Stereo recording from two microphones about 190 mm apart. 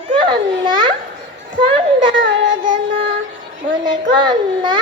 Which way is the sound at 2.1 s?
75° right (ahead or behind).